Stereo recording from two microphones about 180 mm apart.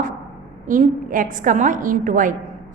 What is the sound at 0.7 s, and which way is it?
A woman's voice, 45° right (ahead or behind).